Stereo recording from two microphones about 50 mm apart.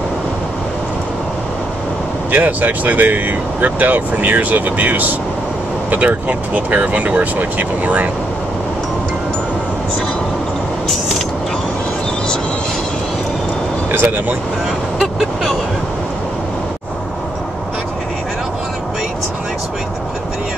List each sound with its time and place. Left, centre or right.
2.3 s speech: right
13.9 s speech: right
15.0 s vehicle: centre